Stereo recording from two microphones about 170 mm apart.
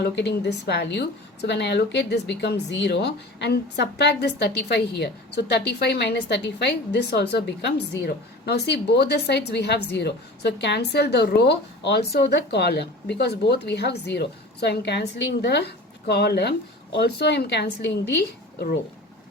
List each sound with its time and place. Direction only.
0.0 s a woman's voice: 80° left